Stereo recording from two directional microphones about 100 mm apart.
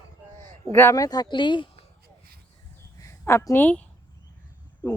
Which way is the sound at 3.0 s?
30° left (ahead or behind).